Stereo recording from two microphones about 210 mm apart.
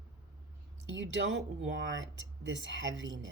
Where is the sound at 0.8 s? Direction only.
60° right (ahead or behind).